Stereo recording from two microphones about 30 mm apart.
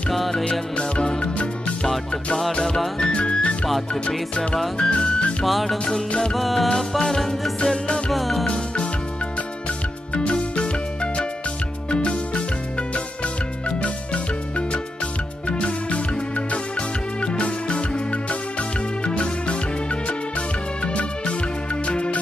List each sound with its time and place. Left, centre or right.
0.5 s music: left
3.0 s music: left
3.9 s music: centre
4.7 s music: left
5.4 s music: centre
5.9 s music: left
6.3 s music: centre
7.6 s music: left
8.1 s music: centre
11.9 s music: left
13.7 s music: left
15.4 s music: left
20.8 s music: left